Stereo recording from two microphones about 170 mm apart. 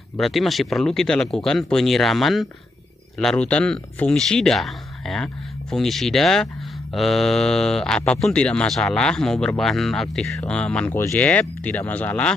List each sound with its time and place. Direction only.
0.2 s speech: centre (ahead or behind)